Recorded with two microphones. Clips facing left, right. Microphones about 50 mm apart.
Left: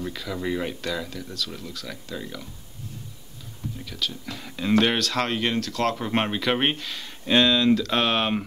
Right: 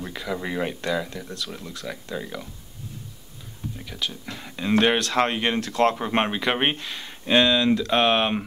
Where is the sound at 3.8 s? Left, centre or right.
Centre.